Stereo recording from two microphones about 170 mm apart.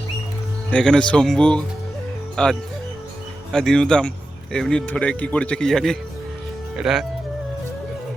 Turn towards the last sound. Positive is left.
turn(degrees=-5)  # may be behind; listen again after turning